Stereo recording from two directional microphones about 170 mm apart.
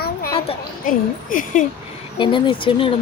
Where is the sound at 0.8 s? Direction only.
50° left (ahead or behind).